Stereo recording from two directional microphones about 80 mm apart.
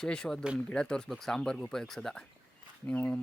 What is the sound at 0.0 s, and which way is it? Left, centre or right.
Speech, centre.